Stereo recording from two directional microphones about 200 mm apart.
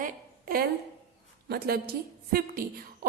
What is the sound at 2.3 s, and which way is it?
Speech, 50° right (ahead or behind).